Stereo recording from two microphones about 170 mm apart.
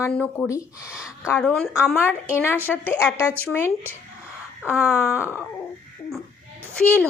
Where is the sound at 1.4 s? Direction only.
5° left (ahead or behind).